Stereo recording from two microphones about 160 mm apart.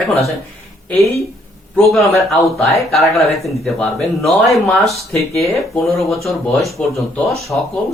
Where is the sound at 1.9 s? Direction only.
Centre (ahead or behind).